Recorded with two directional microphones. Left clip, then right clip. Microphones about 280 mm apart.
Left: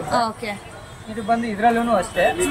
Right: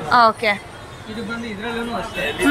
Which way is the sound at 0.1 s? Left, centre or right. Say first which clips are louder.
Right 8 dB; centre.